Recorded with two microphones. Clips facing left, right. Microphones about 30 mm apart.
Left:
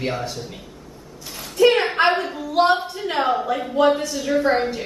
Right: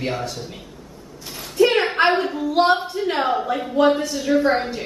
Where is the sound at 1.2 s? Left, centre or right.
Centre.